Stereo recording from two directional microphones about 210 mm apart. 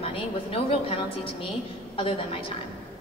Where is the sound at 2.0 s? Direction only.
25° left (ahead or behind).